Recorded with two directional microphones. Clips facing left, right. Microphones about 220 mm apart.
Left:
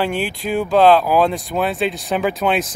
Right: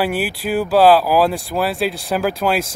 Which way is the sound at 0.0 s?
5° right (ahead or behind).